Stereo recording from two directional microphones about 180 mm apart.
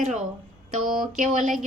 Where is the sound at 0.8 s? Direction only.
Centre (ahead or behind).